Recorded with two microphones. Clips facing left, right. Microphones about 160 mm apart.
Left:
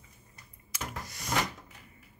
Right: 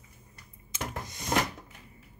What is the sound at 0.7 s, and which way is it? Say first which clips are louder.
Power windows: right 3 dB; 20° right (ahead or behind).